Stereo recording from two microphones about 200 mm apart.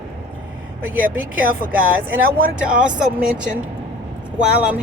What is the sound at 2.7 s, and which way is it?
Speech, 5° right (ahead or behind).